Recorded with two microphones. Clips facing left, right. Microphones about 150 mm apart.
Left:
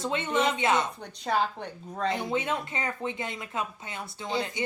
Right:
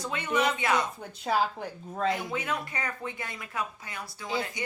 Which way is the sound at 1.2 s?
5° right (ahead or behind).